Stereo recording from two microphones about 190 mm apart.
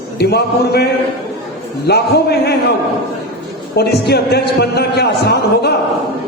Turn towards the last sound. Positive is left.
turn(degrees=60)  # may be behind; listen again after turning